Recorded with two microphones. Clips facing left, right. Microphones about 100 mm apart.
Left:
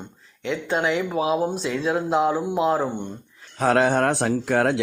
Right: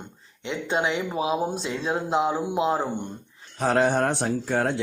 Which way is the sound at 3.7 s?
90° left.